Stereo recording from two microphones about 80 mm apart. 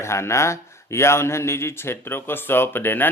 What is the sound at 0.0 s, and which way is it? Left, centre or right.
Speech, left.